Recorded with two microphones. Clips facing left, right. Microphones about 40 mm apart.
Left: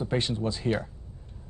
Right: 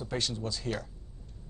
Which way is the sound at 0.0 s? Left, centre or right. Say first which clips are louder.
Left 6 dB; left.